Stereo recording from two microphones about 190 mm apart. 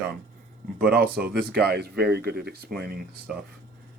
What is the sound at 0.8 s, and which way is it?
Speech, 55° right (ahead or behind).